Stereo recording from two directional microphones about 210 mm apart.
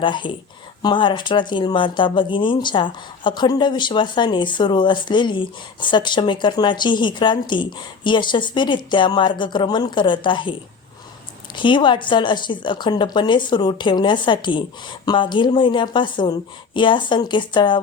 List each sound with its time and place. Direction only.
0.0 s a woman's voice: 25° left (ahead or behind)
11.5 s a woman's voice: 25° left (ahead or behind)